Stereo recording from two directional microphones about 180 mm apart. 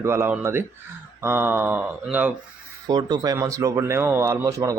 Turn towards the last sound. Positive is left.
turn(degrees=-20)  # may be behind; listen again after turning